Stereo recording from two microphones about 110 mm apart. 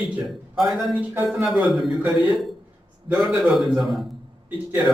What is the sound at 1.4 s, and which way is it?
A man's voice, centre (ahead or behind).